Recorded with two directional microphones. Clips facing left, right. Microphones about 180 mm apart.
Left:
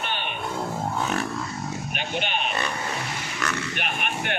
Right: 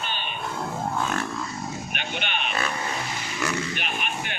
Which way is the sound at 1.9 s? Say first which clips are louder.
Left 5 dB; 40° left (ahead or behind).